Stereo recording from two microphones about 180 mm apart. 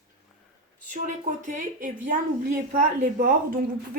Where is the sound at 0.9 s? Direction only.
45° right (ahead or behind).